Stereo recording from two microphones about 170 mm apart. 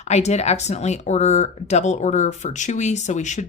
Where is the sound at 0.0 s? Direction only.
40° left (ahead or behind).